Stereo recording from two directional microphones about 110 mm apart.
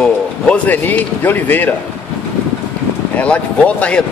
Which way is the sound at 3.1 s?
10° left (ahead or behind).